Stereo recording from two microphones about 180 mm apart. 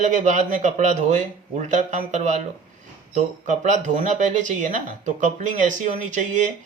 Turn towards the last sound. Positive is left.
turn(degrees=-45)  # may be behind; listen again after turning